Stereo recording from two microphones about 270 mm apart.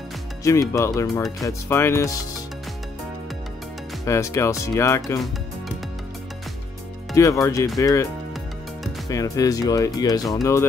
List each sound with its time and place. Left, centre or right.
0.4 s speech: centre
1.0 s speech: centre
4.0 s speech: centre
7.2 s speech: centre
9.1 s speech: centre